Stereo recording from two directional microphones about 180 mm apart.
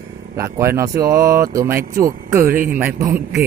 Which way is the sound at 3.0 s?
20° right (ahead or behind).